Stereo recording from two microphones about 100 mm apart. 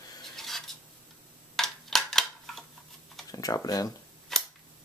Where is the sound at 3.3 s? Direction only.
35° left (ahead or behind).